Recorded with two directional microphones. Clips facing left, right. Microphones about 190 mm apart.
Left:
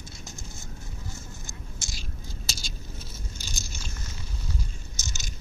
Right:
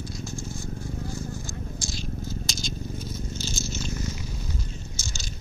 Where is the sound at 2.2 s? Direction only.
5° left (ahead or behind).